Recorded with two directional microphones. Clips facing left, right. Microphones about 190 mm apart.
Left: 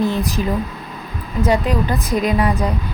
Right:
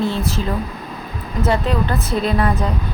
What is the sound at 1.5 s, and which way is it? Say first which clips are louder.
Speech: left 1 dB; 15° left (ahead or behind).